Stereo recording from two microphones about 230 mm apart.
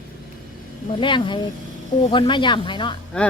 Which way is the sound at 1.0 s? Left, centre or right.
Left.